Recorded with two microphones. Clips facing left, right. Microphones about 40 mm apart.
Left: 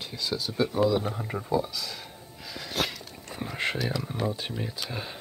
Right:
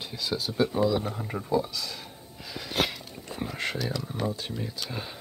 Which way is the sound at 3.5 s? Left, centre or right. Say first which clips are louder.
Left 3 dB; centre.